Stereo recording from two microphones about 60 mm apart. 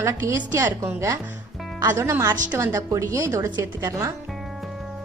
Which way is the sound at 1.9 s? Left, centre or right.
Right.